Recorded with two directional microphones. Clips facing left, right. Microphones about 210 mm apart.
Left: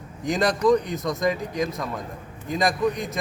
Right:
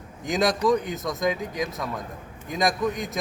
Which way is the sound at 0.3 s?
Centre (ahead or behind).